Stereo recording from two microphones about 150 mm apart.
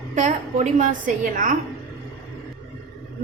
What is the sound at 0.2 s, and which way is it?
A woman's voice, 55° right (ahead or behind).